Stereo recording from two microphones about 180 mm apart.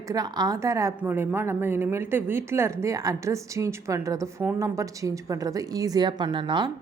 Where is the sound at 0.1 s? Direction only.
20° right (ahead or behind).